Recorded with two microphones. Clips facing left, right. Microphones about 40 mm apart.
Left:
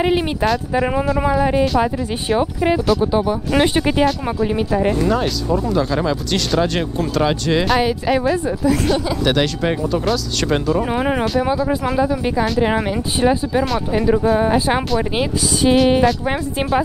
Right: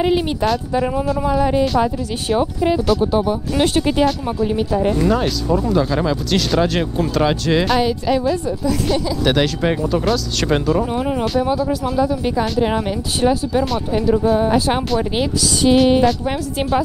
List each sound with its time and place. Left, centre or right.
0.0 s speech: centre
2.9 s speech: centre
3.5 s speech: centre
4.9 s speech: centre
12.4 s speech: centre
15.3 s music: left
15.7 s speech: centre